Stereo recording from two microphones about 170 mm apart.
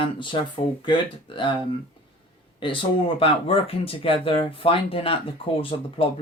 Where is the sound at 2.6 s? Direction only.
30° left (ahead or behind).